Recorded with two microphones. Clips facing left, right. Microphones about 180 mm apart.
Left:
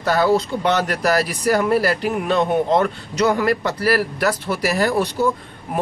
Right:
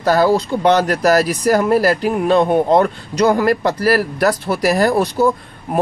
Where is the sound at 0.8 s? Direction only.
40° right (ahead or behind).